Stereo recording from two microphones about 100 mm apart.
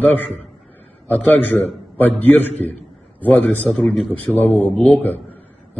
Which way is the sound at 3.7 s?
5° left (ahead or behind).